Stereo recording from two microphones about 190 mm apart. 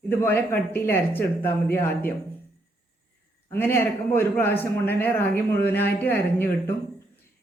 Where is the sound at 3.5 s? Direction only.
10° left (ahead or behind).